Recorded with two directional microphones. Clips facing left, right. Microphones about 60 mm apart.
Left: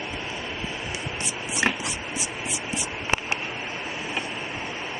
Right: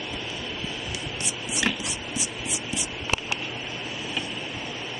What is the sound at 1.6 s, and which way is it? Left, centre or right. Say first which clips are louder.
Chopping: left 3 dB; left.